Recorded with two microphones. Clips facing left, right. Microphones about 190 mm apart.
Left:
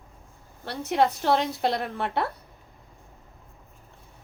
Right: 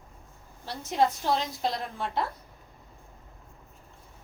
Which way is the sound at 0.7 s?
65° left (ahead or behind).